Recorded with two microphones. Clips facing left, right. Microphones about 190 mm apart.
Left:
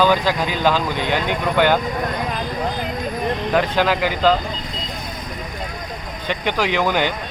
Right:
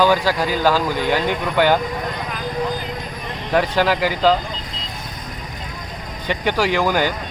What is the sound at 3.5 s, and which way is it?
Speech, 10° right (ahead or behind).